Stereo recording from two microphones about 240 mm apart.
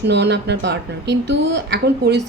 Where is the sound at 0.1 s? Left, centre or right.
Right.